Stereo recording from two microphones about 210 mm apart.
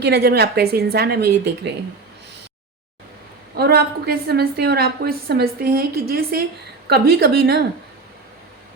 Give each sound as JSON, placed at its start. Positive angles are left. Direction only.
{"t": 0.0, "sound": "a woman's voice", "side_deg": -50}
{"t": 3.5, "sound": "a woman's voice", "side_deg": -50}